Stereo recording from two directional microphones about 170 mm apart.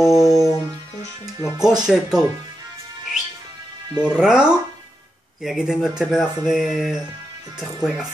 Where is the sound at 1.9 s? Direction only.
Centre (ahead or behind).